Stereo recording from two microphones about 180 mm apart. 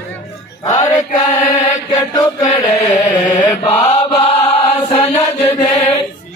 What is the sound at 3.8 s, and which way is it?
Chant, 20° left (ahead or behind).